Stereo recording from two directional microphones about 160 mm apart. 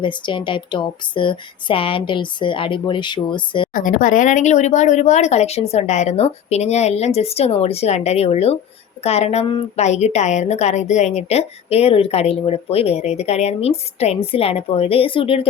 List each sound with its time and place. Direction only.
0.0 s a woman's voice: 30° left (ahead or behind)
3.8 s a woman's voice: 55° left (ahead or behind); by 15.4 s 35° left (ahead or behind)